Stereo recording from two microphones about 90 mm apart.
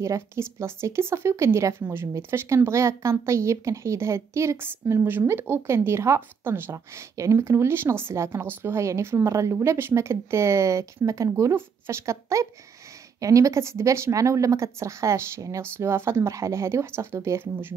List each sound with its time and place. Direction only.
0.0 s speech: 30° right (ahead or behind)